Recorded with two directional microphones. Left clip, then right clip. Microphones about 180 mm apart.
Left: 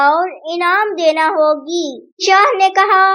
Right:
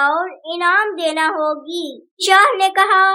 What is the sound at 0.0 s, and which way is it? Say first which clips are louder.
A child's voice: left 4 dB; 15° left (ahead or behind).